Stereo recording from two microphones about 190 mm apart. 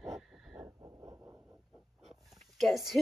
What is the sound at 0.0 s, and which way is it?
Owl, centre (ahead or behind).